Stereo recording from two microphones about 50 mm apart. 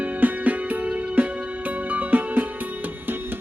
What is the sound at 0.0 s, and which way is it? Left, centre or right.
Music, right.